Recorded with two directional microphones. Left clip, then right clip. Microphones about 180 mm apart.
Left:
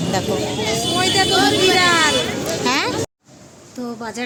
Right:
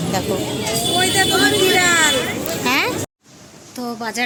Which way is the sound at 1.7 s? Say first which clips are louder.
Even; 45° left (ahead or behind).